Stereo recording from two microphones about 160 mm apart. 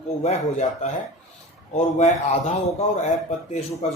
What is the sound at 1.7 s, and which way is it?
A man's voice, 40° left (ahead or behind).